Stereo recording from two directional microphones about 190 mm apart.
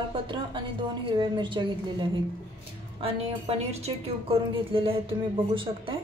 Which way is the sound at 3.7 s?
30° right (ahead or behind).